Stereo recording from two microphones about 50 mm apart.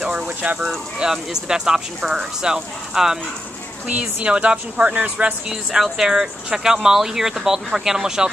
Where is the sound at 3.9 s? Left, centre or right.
Right.